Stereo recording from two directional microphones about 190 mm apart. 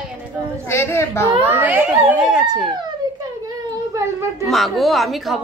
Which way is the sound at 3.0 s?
20° right (ahead or behind).